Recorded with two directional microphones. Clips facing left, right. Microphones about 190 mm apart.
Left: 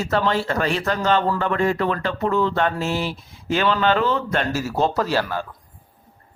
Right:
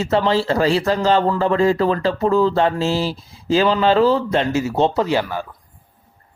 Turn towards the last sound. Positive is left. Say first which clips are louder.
# right 3 dB
turn(degrees=-10)  # may be behind; listen again after turning